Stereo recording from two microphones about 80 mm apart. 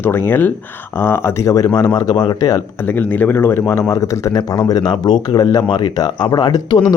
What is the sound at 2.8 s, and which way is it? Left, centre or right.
A man's voice, left.